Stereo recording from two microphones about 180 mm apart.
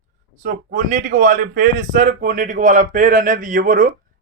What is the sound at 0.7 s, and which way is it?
A man's voice, 45° right (ahead or behind).